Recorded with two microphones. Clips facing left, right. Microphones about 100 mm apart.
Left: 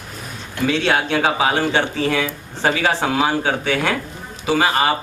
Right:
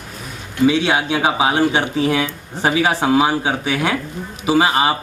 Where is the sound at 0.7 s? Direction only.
15° right (ahead or behind).